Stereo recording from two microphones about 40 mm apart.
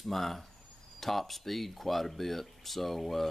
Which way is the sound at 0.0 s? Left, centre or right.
Centre.